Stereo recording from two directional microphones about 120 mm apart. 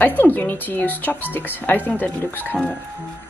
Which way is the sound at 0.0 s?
15° left (ahead or behind).